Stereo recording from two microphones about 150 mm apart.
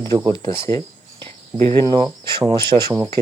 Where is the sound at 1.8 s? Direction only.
30° right (ahead or behind).